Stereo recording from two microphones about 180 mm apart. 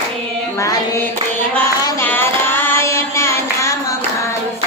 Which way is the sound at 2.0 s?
10° left (ahead or behind).